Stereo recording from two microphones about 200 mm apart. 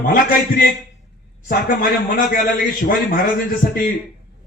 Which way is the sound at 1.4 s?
45° left (ahead or behind).